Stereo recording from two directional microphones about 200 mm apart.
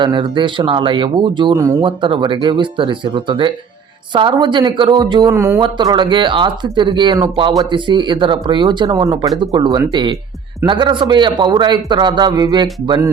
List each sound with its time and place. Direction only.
0.0 s speech: 25° right (ahead or behind)